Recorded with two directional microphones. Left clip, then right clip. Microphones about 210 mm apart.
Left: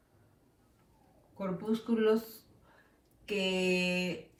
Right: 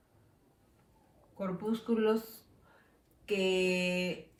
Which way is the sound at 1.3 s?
20° right (ahead or behind).